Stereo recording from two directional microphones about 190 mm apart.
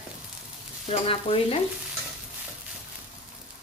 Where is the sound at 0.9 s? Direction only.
30° left (ahead or behind).